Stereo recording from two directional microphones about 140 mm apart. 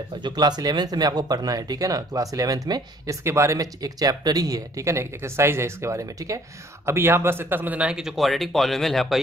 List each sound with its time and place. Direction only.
0.2 s speech: 30° right (ahead or behind); by 9.2 s centre (ahead or behind)